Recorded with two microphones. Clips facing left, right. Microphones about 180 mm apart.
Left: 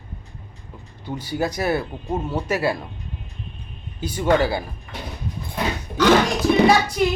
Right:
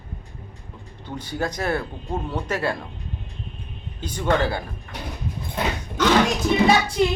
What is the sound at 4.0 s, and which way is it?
Speech, 10° left (ahead or behind).